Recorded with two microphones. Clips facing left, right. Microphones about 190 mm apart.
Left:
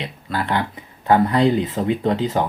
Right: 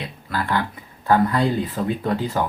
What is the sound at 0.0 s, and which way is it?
Speech, 20° left (ahead or behind).